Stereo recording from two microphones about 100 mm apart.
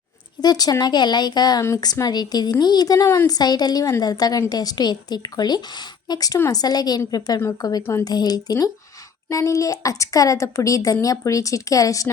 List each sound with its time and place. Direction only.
0.4 s a woman's voice: 40° left (ahead or behind)
3.3 s a woman's voice: 45° left (ahead or behind)